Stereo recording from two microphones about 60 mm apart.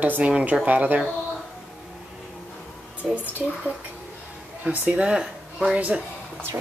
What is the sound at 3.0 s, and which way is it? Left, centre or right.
A woman's voice, right.